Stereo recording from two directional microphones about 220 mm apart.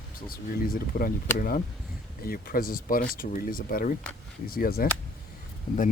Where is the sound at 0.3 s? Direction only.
40° left (ahead or behind).